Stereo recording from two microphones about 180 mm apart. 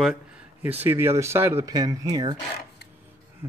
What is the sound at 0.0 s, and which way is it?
Speech, 5° right (ahead or behind).